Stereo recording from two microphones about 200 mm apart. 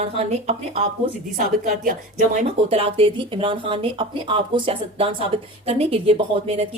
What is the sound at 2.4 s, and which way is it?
Speech, 30° right (ahead or behind).